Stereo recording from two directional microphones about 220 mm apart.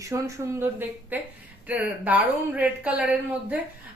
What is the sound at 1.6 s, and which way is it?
A woman's voice, 5° right (ahead or behind).